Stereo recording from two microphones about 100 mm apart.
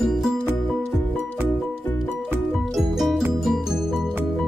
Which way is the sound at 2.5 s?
Centre (ahead or behind).